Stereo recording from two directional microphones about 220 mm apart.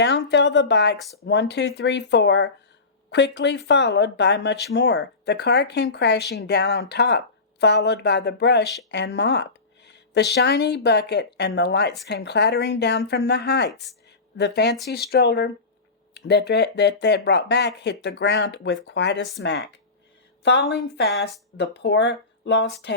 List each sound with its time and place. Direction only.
0.0 s speech: 50° left (ahead or behind)
20.4 s speech: 55° left (ahead or behind)